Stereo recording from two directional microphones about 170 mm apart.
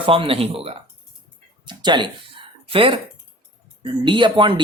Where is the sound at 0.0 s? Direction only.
30° right (ahead or behind).